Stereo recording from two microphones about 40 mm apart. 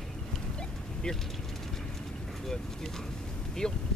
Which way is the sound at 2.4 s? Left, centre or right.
Centre.